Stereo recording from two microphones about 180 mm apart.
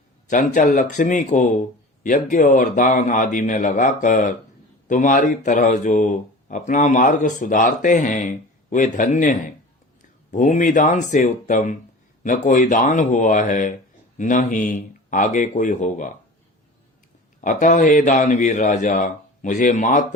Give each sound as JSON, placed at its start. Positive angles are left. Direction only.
{"t": 0.3, "sound": "speech", "side_deg": 45}
{"t": 17.4, "sound": "speech", "side_deg": 45}